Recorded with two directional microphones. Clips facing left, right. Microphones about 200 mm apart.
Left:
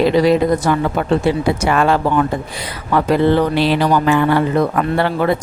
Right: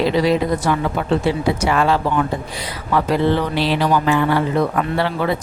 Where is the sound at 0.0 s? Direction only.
50° left (ahead or behind).